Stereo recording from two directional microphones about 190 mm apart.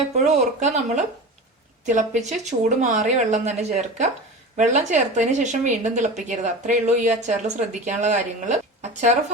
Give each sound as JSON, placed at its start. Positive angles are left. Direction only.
{"t": 0.3, "sound": "speech", "side_deg": -40}